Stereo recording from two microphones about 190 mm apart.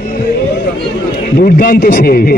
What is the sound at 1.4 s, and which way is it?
A man's voice, 50° left (ahead or behind).